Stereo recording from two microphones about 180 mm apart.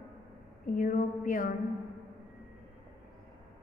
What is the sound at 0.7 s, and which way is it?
Speech, 50° left (ahead or behind).